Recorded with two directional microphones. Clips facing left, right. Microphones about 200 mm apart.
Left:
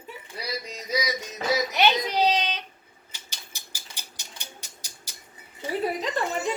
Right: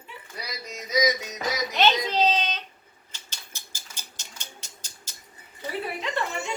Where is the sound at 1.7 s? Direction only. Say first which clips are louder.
Even; 10° left (ahead or behind).